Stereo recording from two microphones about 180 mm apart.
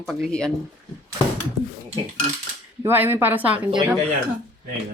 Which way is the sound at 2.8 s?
10° right (ahead or behind).